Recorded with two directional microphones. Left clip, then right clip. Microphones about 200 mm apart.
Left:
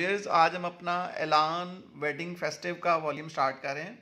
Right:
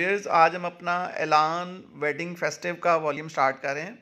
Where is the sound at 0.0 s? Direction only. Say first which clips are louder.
Right 4 dB; 20° right (ahead or behind); by 3.9 s 40° right (ahead or behind).